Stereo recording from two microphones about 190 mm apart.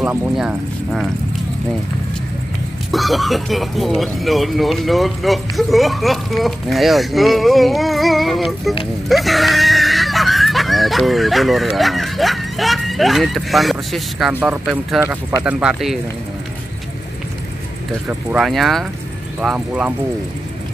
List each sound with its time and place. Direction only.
0.0 s speech: 10° right (ahead or behind)
2.9 s speech: centre (ahead or behind)
18.0 s speech: 5° right (ahead or behind)